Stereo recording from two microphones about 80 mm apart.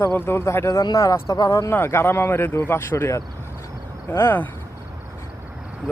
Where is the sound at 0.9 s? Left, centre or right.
Left.